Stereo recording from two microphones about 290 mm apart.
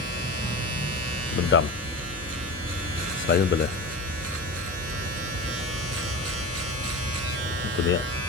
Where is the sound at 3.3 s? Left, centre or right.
Left.